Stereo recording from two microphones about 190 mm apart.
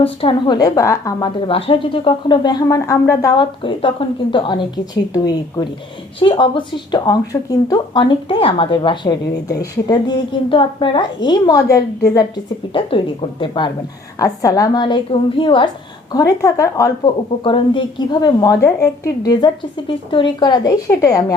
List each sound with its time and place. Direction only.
0.0 s a woman's voice: 30° left (ahead or behind)